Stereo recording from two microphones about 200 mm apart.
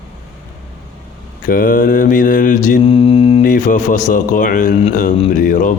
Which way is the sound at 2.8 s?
30° left (ahead or behind).